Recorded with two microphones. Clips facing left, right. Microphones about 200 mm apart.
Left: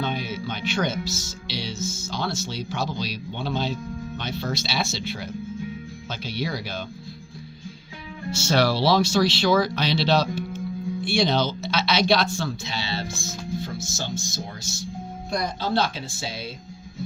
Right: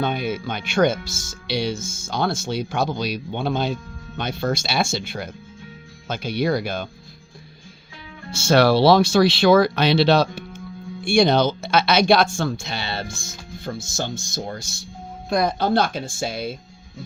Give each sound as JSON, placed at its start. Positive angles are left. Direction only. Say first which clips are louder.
{"t": 0.0, "sound": "speech", "louder": "right 4 dB", "side_deg": -55}
{"t": 8.3, "sound": "speech", "louder": "right 6 dB", "side_deg": -55}